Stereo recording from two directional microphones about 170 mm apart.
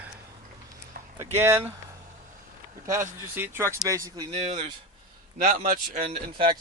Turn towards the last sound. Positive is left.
turn(degrees=-30)  # may be behind; listen again after turning